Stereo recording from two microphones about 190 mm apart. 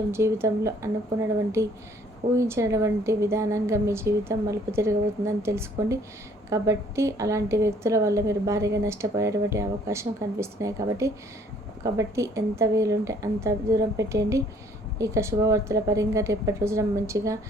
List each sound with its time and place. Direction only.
0.1 s a woman's voice: 15° right (ahead or behind)
2.3 s a woman's voice: 15° right (ahead or behind)